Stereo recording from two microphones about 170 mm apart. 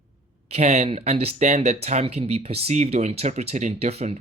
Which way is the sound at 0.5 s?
40° right (ahead or behind).